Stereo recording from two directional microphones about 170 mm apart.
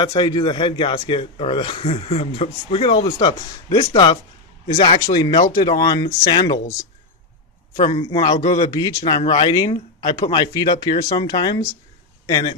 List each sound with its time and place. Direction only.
0.0 s a man's voice: 25° left (ahead or behind)
7.7 s speech: 40° left (ahead or behind)
8.0 s a man's voice: 25° left (ahead or behind)
8.3 s a man's voice: 40° left (ahead or behind)
8.7 s a man's voice: 20° left (ahead or behind)
9.9 s a sound: 20° left (ahead or behind)
10.3 s a man's voice: 25° left (ahead or behind)